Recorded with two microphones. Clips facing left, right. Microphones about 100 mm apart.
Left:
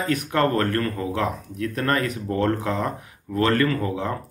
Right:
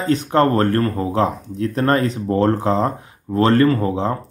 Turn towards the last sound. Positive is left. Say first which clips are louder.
# right 6 dB
turn(degrees=-30)  # may be behind; listen again after turning